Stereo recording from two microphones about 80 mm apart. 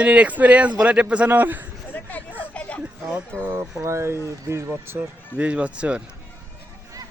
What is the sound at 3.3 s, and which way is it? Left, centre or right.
Speech, centre.